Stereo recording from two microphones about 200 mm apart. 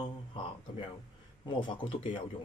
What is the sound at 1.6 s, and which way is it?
Speech, 25° left (ahead or behind).